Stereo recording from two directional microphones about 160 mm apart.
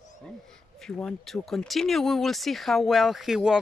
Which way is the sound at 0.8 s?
5° left (ahead or behind).